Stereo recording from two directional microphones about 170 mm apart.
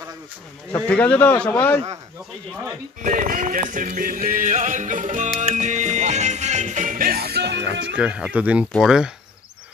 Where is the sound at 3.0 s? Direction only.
50° right (ahead or behind); by 8.0 s 90° right.